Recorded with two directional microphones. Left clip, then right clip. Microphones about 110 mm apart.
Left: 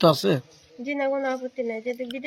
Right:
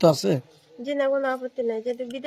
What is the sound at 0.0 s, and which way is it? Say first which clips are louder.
Speech: even; 35° right (ahead or behind).